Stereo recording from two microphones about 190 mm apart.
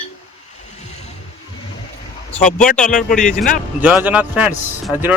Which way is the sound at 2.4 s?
40° left (ahead or behind).